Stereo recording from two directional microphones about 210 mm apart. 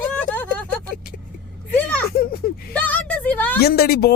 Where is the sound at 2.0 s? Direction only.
45° left (ahead or behind).